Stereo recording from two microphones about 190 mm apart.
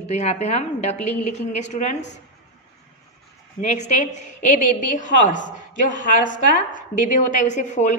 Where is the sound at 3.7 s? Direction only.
40° left (ahead or behind).